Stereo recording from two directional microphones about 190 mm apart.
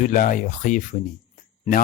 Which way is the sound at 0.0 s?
45° left (ahead or behind).